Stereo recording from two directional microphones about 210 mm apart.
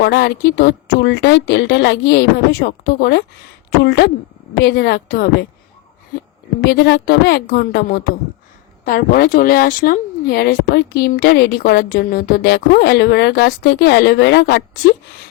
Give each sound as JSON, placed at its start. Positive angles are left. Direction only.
{"t": 0.0, "sound": "a woman's voice", "side_deg": 50}
{"t": 6.7, "sound": "a woman's voice", "side_deg": 50}